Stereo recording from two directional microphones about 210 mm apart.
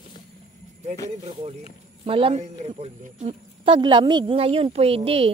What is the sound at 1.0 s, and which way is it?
A man's voice, 30° right (ahead or behind).